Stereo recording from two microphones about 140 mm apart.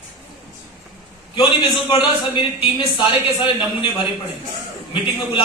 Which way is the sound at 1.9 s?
40° left (ahead or behind).